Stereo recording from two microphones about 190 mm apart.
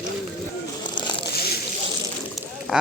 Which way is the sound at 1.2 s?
55° left (ahead or behind).